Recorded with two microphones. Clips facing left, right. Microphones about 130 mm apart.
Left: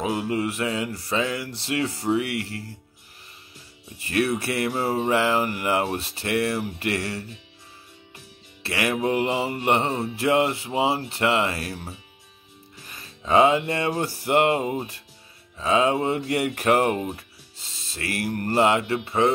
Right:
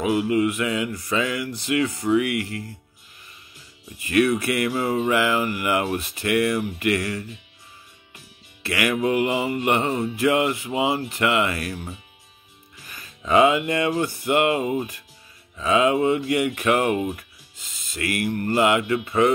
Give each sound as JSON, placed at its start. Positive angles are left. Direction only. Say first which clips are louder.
{"t": 0.0, "sound": "mantra", "louder": "right 5 dB", "side_deg": 30}
{"t": 4.0, "sound": "mantra", "louder": "right 4 dB", "side_deg": 30}
{"t": 8.6, "sound": "mantra", "louder": "right 2 dB", "side_deg": 30}
{"t": 12.8, "sound": "music", "louder": "right 1 dB", "side_deg": 30}
{"t": 15.5, "sound": "speech", "louder": "right 2 dB", "side_deg": 30}